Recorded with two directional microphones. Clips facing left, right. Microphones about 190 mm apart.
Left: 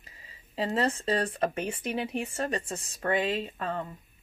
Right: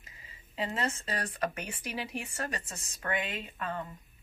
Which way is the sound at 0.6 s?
40° left (ahead or behind).